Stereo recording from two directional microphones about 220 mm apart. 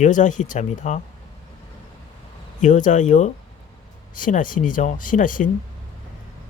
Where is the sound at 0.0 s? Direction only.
35° left (ahead or behind).